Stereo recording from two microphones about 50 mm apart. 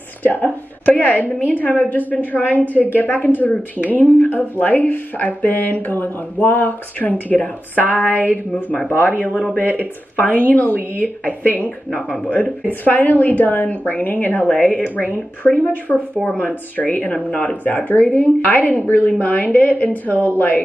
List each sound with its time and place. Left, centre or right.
0.2 s a woman's voice: left